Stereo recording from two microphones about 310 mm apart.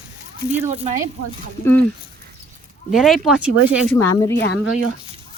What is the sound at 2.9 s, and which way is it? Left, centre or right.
Speech, centre.